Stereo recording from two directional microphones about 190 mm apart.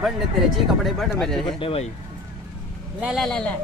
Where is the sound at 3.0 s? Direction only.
Centre (ahead or behind).